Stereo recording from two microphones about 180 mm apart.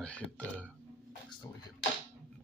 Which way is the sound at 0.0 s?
5° left (ahead or behind).